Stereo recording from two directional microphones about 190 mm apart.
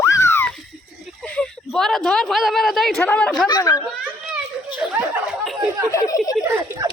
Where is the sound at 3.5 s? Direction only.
20° left (ahead or behind).